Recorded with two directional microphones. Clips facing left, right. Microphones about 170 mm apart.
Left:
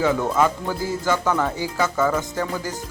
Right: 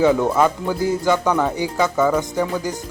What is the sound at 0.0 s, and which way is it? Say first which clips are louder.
Speech: right 4 dB; 20° right (ahead or behind).